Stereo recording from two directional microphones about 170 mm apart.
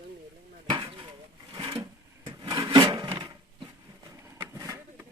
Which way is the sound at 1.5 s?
25° right (ahead or behind).